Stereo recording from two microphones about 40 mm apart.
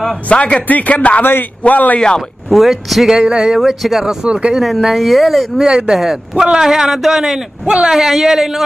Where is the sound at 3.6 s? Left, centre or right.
Centre.